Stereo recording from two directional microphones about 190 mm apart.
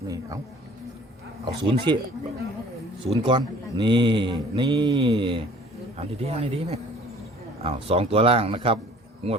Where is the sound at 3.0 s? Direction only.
25° right (ahead or behind).